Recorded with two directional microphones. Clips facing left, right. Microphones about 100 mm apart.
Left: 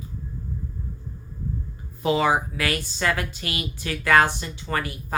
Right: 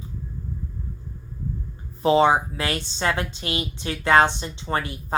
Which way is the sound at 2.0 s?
30° right (ahead or behind).